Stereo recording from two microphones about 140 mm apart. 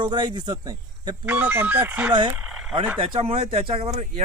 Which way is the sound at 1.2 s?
10° right (ahead or behind).